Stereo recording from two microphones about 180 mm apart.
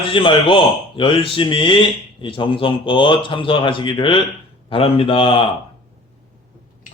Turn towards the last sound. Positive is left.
turn(degrees=30)  # may be behind; listen again after turning